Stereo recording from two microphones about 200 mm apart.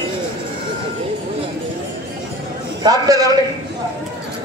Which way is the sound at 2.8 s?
20° right (ahead or behind).